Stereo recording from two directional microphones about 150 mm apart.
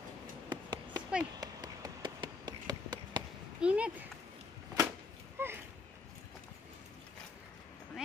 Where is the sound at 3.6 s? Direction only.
10° right (ahead or behind).